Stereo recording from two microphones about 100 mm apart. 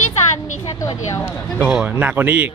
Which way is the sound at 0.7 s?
30° left (ahead or behind).